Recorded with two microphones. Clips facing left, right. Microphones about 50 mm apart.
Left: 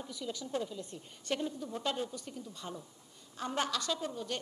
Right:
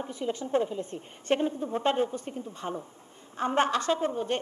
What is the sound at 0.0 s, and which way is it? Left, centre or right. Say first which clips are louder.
A woman's voice: right 9 dB; right.